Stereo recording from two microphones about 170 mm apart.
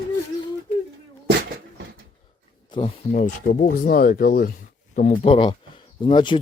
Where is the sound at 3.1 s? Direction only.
50° left (ahead or behind).